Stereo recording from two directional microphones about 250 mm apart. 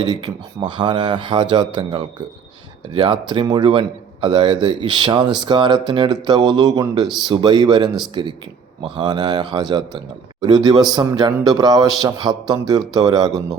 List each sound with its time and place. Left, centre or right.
0.0 s a man's voice: centre